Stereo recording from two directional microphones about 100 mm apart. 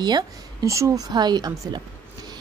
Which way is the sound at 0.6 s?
30° right (ahead or behind).